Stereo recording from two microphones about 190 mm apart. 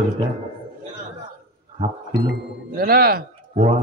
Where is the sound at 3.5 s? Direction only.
35° right (ahead or behind).